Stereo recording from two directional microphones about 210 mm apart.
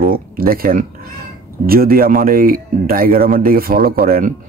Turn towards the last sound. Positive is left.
turn(degrees=-45)  # may be behind; listen again after turning